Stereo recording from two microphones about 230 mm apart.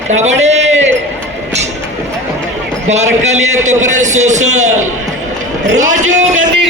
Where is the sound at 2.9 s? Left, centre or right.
Right.